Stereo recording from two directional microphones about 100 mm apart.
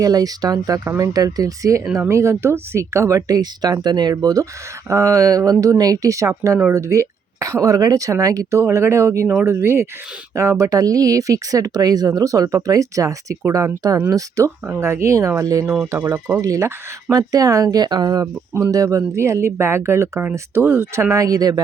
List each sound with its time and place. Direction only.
0.0 s speech: 40° right (ahead or behind)
16.0 s speech: 15° right (ahead or behind)
16.4 s speech: 35° right (ahead or behind)